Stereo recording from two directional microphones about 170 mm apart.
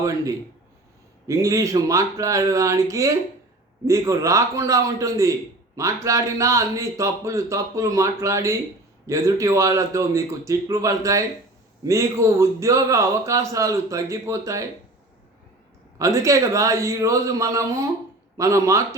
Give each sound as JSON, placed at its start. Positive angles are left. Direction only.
{"t": 0.0, "sound": "a man's voice", "side_deg": -20}
{"t": 16.0, "sound": "a man's voice", "side_deg": -20}